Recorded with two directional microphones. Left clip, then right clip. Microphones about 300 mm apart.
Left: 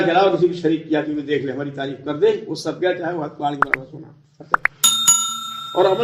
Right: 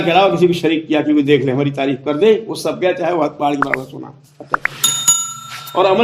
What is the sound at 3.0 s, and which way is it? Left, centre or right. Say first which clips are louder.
Speech: right 8 dB; right.